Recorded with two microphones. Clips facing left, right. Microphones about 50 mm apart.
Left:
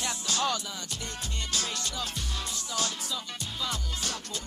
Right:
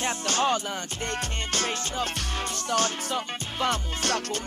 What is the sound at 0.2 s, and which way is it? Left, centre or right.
Music, right.